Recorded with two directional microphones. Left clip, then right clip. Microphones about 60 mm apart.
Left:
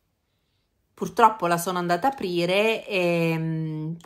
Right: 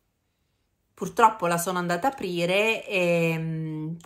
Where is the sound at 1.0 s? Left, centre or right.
Left.